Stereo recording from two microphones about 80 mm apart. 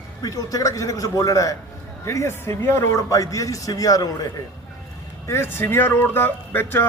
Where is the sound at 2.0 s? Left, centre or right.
Left.